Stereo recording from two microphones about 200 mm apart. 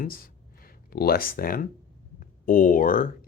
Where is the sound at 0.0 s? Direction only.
45° left (ahead or behind).